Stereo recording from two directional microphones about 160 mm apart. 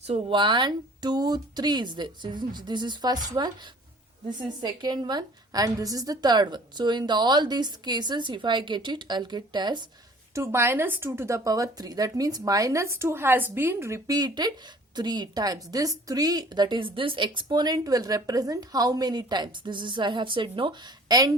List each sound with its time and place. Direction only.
0.1 s a woman's voice: 30° right (ahead or behind)
4.6 s a woman's voice: 25° right (ahead or behind)
10.3 s a woman's voice: 15° right (ahead or behind)